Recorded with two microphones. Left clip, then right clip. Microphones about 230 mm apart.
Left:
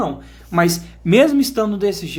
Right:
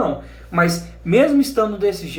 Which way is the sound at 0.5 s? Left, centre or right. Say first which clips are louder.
Left 1 dB; left.